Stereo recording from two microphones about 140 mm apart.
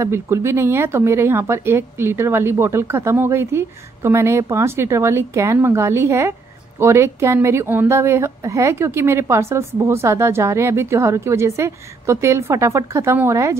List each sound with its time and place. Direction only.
0.0 s speech: 20° right (ahead or behind)